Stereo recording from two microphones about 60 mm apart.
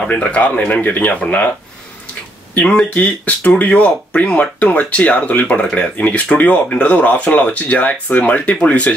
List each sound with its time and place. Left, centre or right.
0.0 s speech: left
2.6 s speech: centre